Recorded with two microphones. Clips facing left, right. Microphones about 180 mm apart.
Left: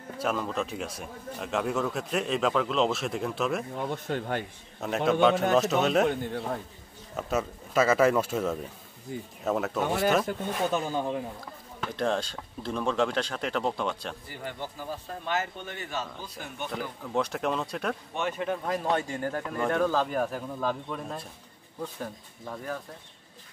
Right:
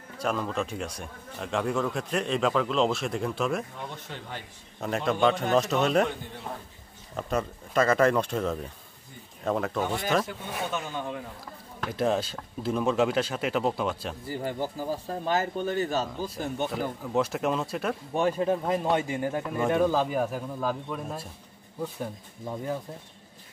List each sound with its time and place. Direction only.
0.2 s a man's voice: centre (ahead or behind)
4.1 s speech: 55° left (ahead or behind)
4.7 s a man's voice: centre (ahead or behind)
7.2 s a man's voice: 5° left (ahead or behind)
10.7 s speech: 35° left (ahead or behind)
11.8 s a man's voice: 5° right (ahead or behind)
14.3 s speech: 40° right (ahead or behind)
17.0 s a man's voice: 5° right (ahead or behind)
18.1 s speech: 35° right (ahead or behind)
18.8 s speech: 10° right (ahead or behind)